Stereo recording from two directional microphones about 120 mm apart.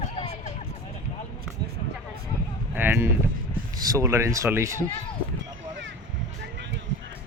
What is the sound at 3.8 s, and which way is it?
Speech, 25° right (ahead or behind).